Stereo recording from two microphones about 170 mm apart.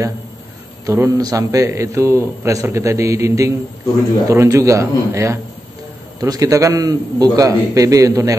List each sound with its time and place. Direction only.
0.8 s a man's voice: 20° right (ahead or behind)